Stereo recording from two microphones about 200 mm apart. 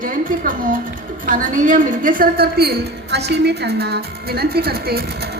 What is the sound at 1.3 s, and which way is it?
A woman's voice, 40° right (ahead or behind).